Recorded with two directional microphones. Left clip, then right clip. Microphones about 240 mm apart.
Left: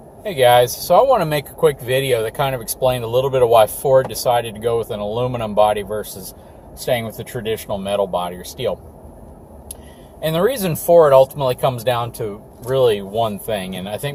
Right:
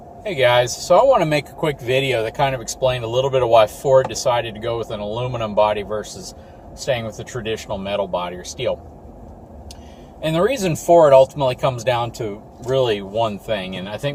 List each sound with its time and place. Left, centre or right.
0.2 s speech: centre
10.2 s speech: centre